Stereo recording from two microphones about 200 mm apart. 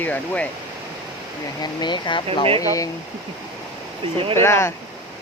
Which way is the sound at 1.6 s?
20° left (ahead or behind).